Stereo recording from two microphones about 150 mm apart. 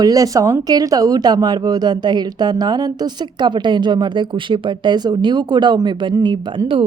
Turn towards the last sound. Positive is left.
turn(degrees=-35)  # may be behind; listen again after turning